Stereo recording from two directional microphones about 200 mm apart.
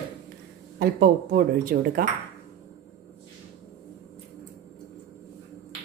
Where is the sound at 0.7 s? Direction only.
50° right (ahead or behind).